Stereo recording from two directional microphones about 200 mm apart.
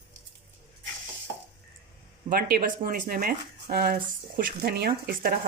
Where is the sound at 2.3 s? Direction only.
50° right (ahead or behind).